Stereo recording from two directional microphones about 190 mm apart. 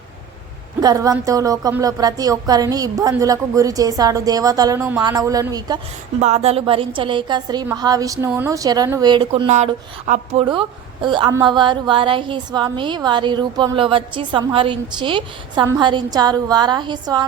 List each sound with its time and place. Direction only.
0.8 s a woman's voice: 20° right (ahead or behind)
6.1 s a woman's voice: 35° right (ahead or behind)